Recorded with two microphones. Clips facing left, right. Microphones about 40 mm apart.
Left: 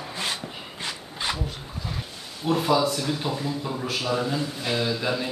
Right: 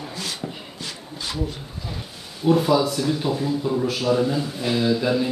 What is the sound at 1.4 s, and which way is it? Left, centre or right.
A man's voice, centre.